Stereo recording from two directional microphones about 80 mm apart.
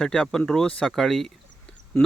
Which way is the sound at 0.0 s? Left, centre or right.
Centre.